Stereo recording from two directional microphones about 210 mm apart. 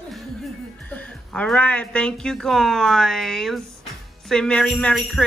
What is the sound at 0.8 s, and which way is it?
Jingle bell, 5° left (ahead or behind).